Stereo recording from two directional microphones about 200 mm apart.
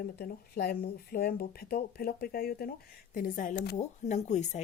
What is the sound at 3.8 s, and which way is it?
Speech, 35° left (ahead or behind).